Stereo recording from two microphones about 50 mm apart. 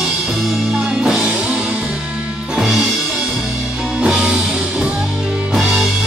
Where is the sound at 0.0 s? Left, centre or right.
Centre.